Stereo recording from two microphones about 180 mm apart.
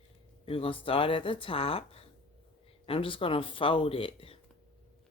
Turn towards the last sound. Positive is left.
turn(degrees=30)  # may be behind; listen again after turning